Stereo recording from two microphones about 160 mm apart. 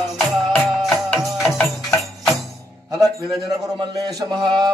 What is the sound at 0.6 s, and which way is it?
Music, centre (ahead or behind).